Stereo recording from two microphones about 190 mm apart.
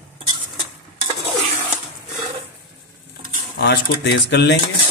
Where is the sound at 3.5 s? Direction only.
60° left (ahead or behind).